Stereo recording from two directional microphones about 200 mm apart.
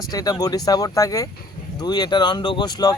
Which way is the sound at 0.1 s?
20° left (ahead or behind).